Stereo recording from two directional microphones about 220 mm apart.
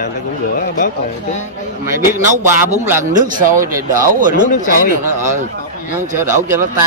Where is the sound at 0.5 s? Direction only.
35° left (ahead or behind).